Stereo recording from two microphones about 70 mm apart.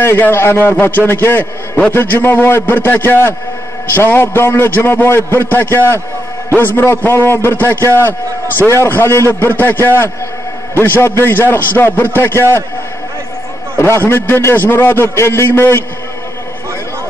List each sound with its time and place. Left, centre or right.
0.0 s a man's voice: left
13.7 s a man's voice: left